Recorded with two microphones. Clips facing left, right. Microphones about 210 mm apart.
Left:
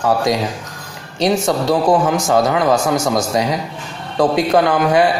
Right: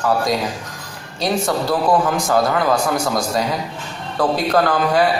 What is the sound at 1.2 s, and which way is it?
A man's voice, 20° left (ahead or behind).